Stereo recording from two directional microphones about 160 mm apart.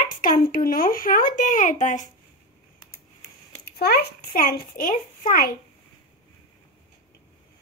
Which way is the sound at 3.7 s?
80° left.